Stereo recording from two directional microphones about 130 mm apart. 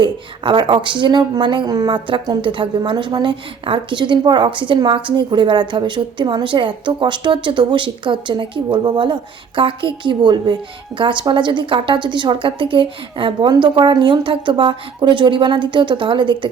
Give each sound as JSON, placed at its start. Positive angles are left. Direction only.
{"t": 0.0, "sound": "speech", "side_deg": -40}